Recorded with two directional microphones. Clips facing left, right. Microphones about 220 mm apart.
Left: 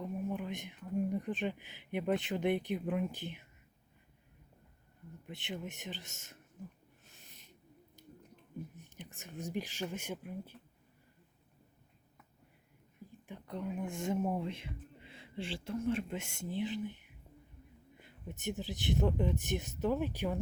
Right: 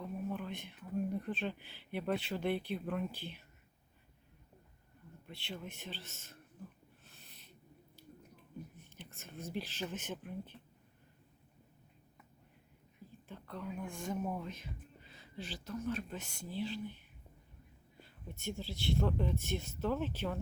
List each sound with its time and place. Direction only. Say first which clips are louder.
0.0 s speech: left 2 dB; 15° left (ahead or behind)
5.2 s speech: left 3 dB; 15° left (ahead or behind)
7.0 s a sound: left 2 dB; 15° left (ahead or behind)
8.8 s speech: left 3 dB; 15° left (ahead or behind)
13.1 s speech: left 3 dB; 15° left (ahead or behind)
18.0 s speech: left 3 dB; 20° left (ahead or behind)